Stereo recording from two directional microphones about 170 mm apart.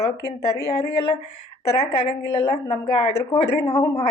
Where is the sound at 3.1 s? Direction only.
25° left (ahead or behind).